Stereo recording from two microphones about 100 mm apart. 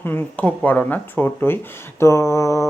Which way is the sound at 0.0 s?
20° left (ahead or behind).